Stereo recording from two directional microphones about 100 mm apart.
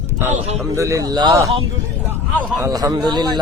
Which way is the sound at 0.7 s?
35° right (ahead or behind).